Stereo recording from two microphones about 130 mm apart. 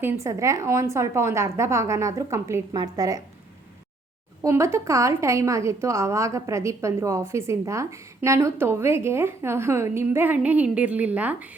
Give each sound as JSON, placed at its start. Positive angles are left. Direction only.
{"t": 0.0, "sound": "a woman's voice", "side_deg": -25}
{"t": 4.4, "sound": "a woman's voice", "side_deg": -20}